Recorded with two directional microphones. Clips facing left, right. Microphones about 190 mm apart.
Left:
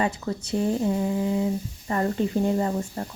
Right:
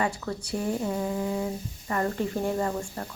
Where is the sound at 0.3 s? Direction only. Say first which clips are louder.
Left 3 dB; 20° left (ahead or behind).